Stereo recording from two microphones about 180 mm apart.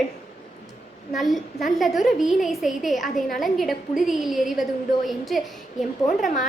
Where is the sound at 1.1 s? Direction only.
Centre (ahead or behind).